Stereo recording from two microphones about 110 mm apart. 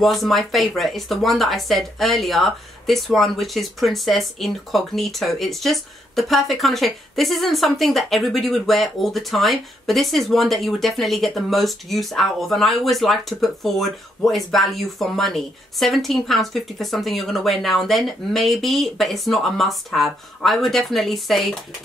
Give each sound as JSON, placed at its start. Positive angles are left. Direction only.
{"t": 0.0, "sound": "speech", "side_deg": 0}